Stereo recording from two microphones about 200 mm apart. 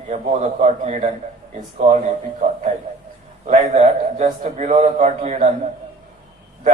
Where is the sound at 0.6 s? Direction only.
35° right (ahead or behind).